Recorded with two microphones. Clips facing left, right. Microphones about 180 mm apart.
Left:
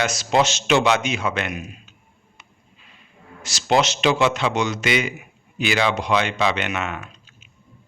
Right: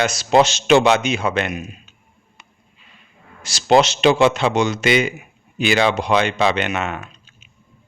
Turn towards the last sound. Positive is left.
turn(degrees=-30)  # may be behind; listen again after turning